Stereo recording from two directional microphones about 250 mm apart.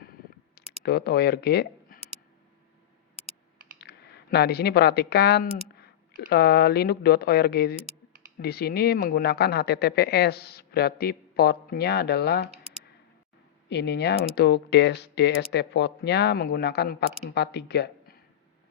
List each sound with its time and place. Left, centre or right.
0.0 s a sound: left
3.8 s speech: left
13.7 s speech: left